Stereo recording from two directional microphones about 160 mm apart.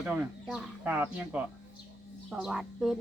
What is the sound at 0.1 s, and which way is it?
Speech, 5° right (ahead or behind).